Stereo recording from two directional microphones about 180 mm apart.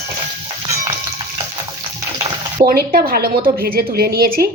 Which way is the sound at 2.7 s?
55° right (ahead or behind).